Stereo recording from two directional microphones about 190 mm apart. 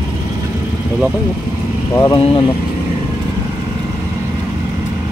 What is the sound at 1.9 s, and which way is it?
Speech, 15° left (ahead or behind).